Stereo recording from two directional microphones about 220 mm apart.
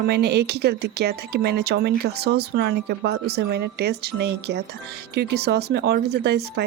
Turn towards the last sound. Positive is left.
turn(degrees=-50)  # may be behind; listen again after turning